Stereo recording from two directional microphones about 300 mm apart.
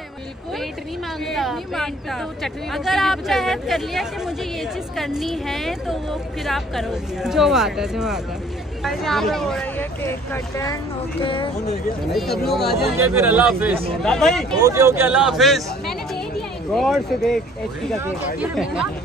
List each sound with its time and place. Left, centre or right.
1.2 s a woman's voice: centre
12.1 s a woman's voice: centre
14.6 s a woman's voice: centre